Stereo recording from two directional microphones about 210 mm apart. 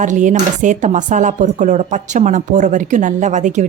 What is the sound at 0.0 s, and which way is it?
A woman's voice, 35° right (ahead or behind).